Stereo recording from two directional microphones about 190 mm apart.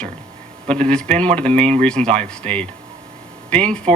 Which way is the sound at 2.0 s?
35° right (ahead or behind).